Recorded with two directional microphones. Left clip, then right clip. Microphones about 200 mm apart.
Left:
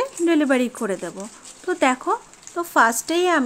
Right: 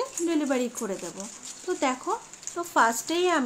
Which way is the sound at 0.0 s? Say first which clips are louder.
Left 8 dB; 40° left (ahead or behind).